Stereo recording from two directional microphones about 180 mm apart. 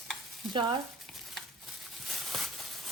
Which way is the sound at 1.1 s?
Centre (ahead or behind).